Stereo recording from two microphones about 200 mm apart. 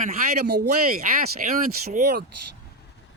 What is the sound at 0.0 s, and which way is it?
Speech, 50° right (ahead or behind).